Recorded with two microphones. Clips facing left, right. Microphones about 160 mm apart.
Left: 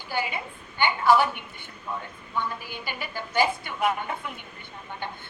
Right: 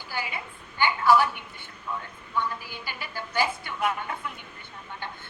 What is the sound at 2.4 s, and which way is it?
A woman's voice, 20° left (ahead or behind).